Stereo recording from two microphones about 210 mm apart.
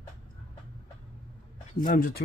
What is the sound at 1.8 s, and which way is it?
Speech, 45° left (ahead or behind).